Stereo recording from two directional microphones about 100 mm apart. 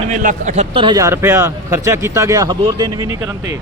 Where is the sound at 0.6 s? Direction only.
60° right (ahead or behind).